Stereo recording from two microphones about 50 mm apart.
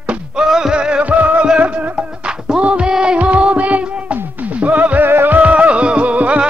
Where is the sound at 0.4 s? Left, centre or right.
Centre; by 5.0 s right.